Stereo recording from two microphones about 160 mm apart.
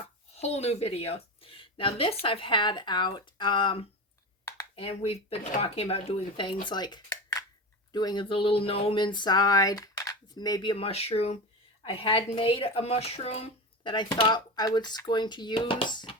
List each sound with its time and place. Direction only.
0.3 s a woman's voice: 40° left (ahead or behind)